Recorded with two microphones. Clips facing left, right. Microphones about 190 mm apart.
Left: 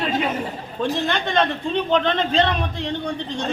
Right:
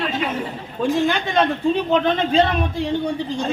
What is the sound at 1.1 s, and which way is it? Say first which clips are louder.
A woman's voice: right 2 dB; 5° right (ahead or behind).